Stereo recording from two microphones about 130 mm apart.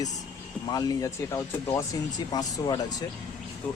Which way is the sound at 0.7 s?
25° left (ahead or behind).